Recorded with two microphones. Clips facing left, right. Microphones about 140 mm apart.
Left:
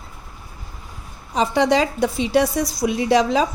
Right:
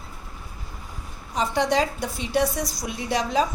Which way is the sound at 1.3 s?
90° left.